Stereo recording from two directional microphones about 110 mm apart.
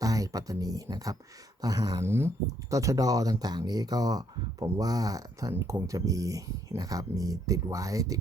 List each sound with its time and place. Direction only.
0.0 s speech: 30° right (ahead or behind)
2.0 s speech: 20° right (ahead or behind)